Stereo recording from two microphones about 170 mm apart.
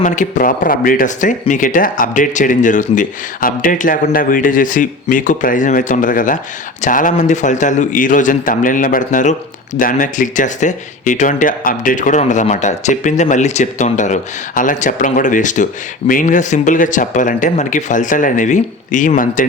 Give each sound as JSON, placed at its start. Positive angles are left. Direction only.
{"t": 0.0, "sound": "speech", "side_deg": 50}